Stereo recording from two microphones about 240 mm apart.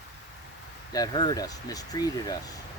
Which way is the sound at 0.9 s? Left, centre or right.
Centre.